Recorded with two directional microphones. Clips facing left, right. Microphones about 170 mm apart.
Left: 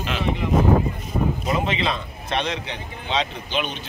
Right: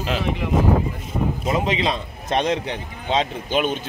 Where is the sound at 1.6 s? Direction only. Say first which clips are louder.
Right 2 dB; 35° right (ahead or behind).